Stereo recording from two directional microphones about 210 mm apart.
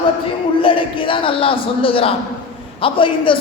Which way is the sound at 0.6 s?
25° left (ahead or behind).